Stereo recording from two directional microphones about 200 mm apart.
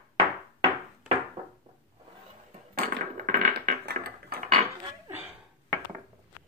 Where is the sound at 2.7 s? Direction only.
45° right (ahead or behind).